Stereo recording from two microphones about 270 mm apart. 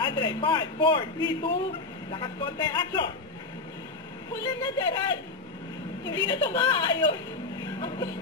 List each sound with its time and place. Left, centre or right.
0.0 s a man's voice: centre
4.4 s a man's voice: centre
7.6 s vehicle: centre